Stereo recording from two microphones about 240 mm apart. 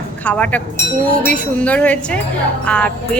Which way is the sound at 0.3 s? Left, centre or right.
Centre.